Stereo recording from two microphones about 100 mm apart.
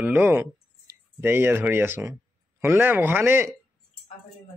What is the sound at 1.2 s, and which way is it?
Speech, 20° right (ahead or behind).